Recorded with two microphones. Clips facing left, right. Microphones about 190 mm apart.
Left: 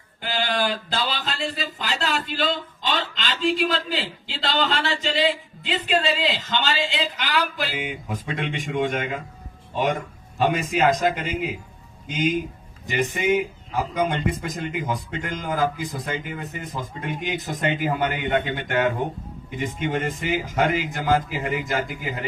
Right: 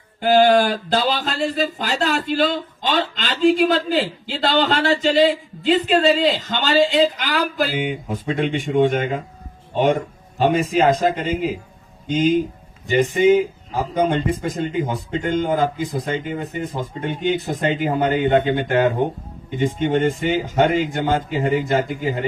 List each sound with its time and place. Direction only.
0.2 s speech: 50° right (ahead or behind)
7.8 s speech: 30° right (ahead or behind)
10.3 s speech: 30° right (ahead or behind)